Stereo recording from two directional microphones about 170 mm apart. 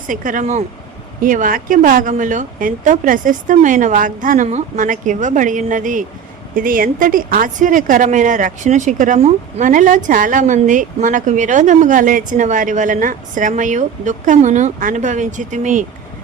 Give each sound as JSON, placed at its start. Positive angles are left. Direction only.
{"t": 0.1, "sound": "a woman's voice", "side_deg": -50}